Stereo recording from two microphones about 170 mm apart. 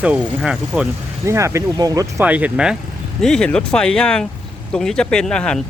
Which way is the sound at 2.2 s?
10° right (ahead or behind).